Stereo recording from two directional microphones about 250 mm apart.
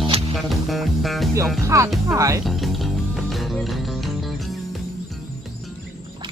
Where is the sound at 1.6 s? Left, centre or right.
Centre.